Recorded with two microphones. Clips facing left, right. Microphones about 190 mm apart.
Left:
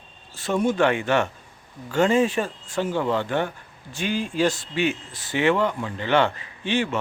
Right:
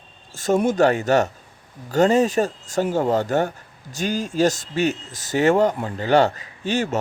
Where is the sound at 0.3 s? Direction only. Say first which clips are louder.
Right 3 dB; 45° right (ahead or behind).